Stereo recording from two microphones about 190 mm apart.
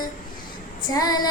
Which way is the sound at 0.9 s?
20° left (ahead or behind).